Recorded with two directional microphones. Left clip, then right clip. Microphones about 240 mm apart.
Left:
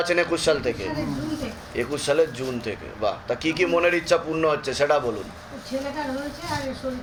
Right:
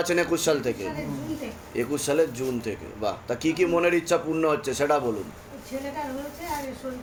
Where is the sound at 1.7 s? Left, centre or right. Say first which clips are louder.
Left 2 dB; right.